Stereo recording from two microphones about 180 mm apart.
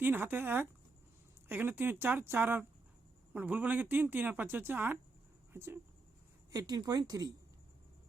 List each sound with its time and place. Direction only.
0.0 s speech: 10° right (ahead or behind)